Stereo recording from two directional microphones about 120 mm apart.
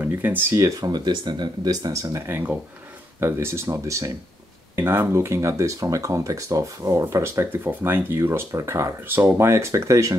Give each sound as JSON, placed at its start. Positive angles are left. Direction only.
{"t": 0.0, "sound": "speech", "side_deg": -15}